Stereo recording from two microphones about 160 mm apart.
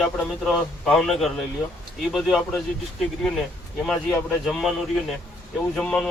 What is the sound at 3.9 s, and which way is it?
Speech, centre (ahead or behind).